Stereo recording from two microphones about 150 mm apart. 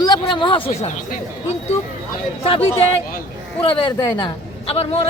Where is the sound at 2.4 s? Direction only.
35° left (ahead or behind).